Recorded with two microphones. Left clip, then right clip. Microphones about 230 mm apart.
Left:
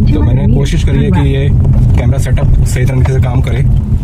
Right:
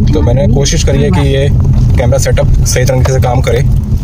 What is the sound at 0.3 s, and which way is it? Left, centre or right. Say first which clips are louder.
Speech: right 5 dB; right.